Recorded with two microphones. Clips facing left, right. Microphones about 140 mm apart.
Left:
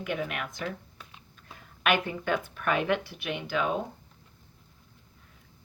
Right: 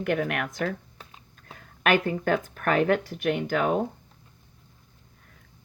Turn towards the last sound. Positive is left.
turn(degrees=-50)  # may be behind; listen again after turning